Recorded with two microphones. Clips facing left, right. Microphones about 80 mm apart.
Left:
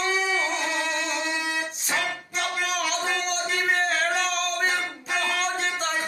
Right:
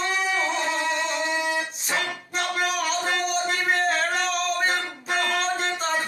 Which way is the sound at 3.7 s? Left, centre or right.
Centre.